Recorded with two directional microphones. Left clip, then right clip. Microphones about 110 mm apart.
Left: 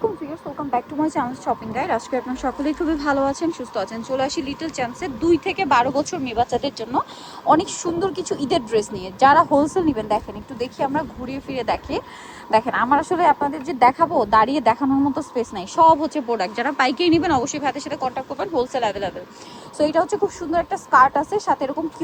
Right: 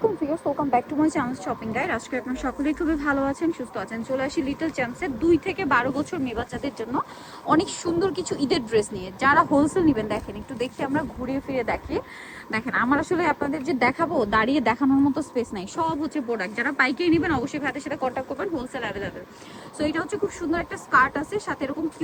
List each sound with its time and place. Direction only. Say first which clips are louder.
0.9 s speech: left 1 dB; 20° left (ahead or behind)
1.5 s speech: left 4 dB; 30° left (ahead or behind)
7.4 s speech: left 5 dB; 25° left (ahead or behind)
8.7 s a woman's voice: left 2 dB; 35° left (ahead or behind); by 14.8 s 20° left (ahead or behind)
15.1 s speech: left 3 dB; 5° left (ahead or behind)
15.8 s speech: left 12 dB; 25° left (ahead or behind)
18.0 s speech: left 2 dB; 15° left (ahead or behind)
18.3 s a woman's voice: left 7 dB; 35° left (ahead or behind)
20.9 s a woman's voice: left 5 dB; 30° left (ahead or behind)